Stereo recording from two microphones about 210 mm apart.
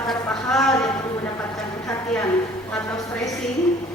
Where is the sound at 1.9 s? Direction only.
15° left (ahead or behind).